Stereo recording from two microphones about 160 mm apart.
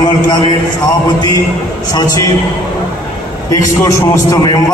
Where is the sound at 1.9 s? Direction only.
25° left (ahead or behind).